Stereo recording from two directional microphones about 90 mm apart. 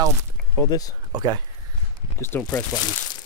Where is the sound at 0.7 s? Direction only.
45° left (ahead or behind).